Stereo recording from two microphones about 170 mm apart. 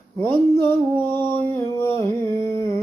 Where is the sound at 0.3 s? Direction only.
15° left (ahead or behind).